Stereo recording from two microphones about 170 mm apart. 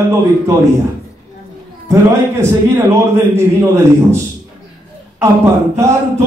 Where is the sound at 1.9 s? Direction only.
15° right (ahead or behind).